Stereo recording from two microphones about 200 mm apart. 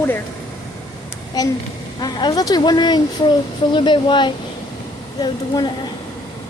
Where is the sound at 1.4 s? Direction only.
20° left (ahead or behind).